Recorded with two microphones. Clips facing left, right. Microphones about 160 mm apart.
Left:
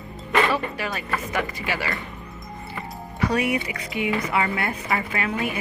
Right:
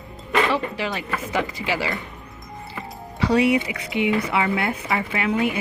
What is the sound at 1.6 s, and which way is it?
Speech, 20° right (ahead or behind).